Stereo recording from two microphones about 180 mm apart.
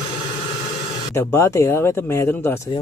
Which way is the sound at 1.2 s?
15° left (ahead or behind).